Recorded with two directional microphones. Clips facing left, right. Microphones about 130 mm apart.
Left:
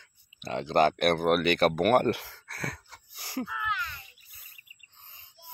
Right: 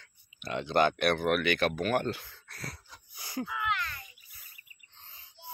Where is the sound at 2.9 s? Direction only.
75° left (ahead or behind).